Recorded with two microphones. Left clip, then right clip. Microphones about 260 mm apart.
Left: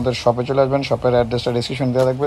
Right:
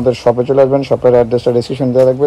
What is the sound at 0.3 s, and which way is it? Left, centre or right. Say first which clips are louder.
A man's voice: right 6 dB; left.